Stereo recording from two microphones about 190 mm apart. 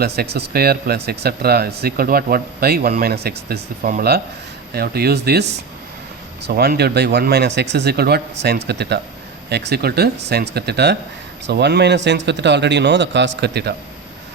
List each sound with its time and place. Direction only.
0.3 s speech: 55° right (ahead or behind)